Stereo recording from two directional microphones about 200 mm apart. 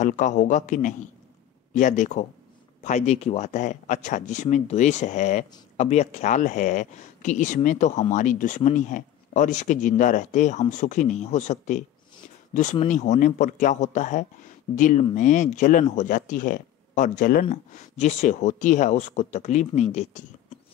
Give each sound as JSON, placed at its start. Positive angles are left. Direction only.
{"t": 0.0, "sound": "speech", "side_deg": 40}